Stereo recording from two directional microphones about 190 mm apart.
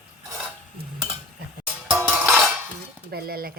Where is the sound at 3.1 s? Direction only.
55° right (ahead or behind).